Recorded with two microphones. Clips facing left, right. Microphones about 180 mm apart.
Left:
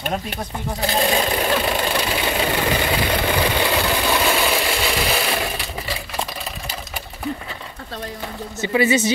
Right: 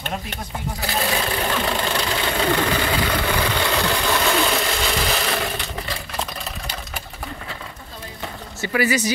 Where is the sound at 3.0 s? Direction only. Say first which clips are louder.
Left 2 dB; 15° left (ahead or behind).